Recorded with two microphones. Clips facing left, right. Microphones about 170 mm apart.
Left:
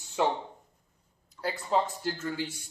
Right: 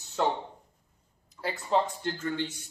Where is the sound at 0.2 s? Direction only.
10° left (ahead or behind).